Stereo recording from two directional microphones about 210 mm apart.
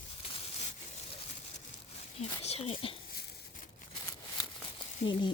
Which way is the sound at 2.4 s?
30° left (ahead or behind).